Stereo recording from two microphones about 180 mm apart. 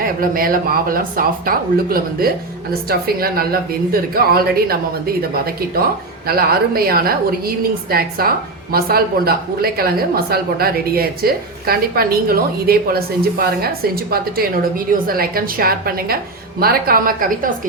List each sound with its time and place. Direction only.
0.2 s speech: 50° right (ahead or behind)
6.2 s speech: 55° right (ahead or behind)